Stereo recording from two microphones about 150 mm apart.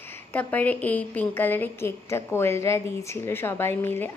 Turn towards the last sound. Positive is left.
turn(degrees=15)  # may be behind; listen again after turning